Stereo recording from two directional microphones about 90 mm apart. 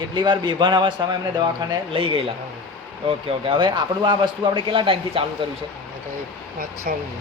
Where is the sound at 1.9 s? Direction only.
90° right.